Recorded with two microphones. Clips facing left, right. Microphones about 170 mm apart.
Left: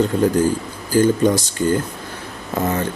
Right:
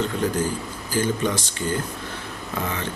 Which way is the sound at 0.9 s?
45° left (ahead or behind).